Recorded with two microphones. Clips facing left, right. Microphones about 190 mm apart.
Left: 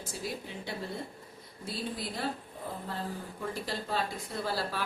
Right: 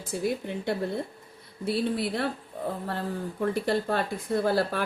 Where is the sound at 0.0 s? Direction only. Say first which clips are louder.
Right 9 dB; 55° right (ahead or behind).